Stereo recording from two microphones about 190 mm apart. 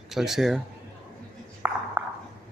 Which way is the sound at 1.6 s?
5° right (ahead or behind).